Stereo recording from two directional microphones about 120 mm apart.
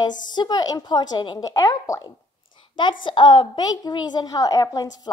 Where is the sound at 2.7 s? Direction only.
40° left (ahead or behind).